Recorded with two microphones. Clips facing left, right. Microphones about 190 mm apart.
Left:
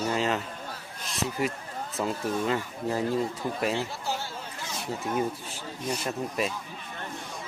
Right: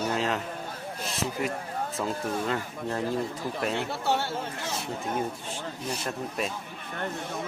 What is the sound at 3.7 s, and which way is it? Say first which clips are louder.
Speech: right 3 dB; 65° right (ahead or behind).